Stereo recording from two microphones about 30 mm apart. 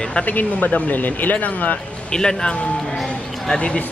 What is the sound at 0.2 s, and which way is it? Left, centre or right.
Speech, left.